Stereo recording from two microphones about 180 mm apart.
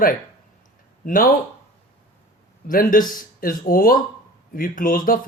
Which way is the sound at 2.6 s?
50° left (ahead or behind).